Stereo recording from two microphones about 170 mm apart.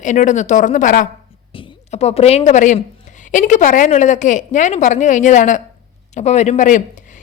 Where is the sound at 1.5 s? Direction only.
35° left (ahead or behind).